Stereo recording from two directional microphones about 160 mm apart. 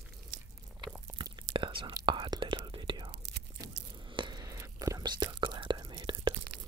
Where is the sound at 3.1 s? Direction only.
90° right.